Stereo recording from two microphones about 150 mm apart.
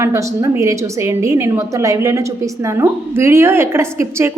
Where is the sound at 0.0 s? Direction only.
20° right (ahead or behind).